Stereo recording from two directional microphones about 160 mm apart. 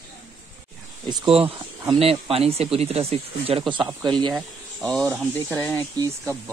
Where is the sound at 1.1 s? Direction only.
35° right (ahead or behind).